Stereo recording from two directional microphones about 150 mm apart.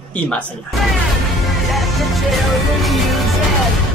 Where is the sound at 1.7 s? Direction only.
Centre (ahead or behind).